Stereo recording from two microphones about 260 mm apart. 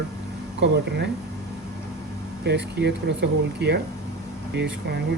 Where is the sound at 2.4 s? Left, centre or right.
Right.